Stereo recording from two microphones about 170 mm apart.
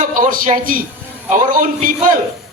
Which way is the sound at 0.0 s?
50° right (ahead or behind).